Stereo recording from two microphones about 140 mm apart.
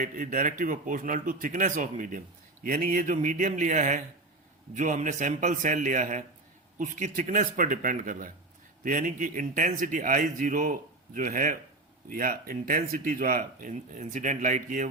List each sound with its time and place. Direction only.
0.0 s a man's voice: 75° right (ahead or behind)